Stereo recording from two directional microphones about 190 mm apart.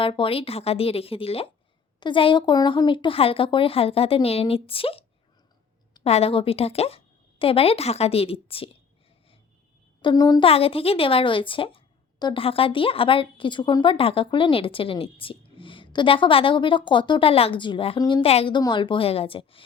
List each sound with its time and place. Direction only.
0.0 s a woman's voice: 30° left (ahead or behind)
10.0 s speech: 20° left (ahead or behind)